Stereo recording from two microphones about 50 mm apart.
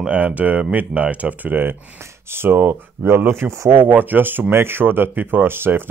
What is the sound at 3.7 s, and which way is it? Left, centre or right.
Speech, right.